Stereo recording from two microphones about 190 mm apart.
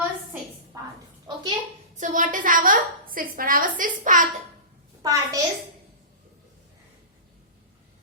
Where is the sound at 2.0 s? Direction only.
40° right (ahead or behind).